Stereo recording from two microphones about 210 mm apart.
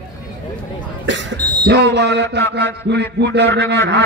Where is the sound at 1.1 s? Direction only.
60° right (ahead or behind).